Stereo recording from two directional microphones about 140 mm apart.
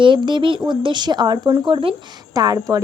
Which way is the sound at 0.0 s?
35° right (ahead or behind).